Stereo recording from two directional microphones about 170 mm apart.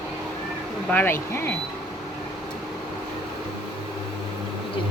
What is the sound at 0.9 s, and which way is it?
Speech, 10° left (ahead or behind).